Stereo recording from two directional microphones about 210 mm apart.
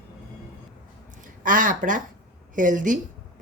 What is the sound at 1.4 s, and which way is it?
A woman's voice, 40° right (ahead or behind).